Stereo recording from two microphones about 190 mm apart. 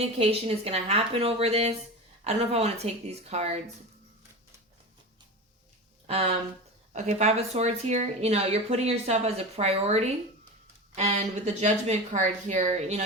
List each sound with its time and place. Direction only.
0.0 s speech: 30° right (ahead or behind)
6.1 s speech: 30° right (ahead or behind)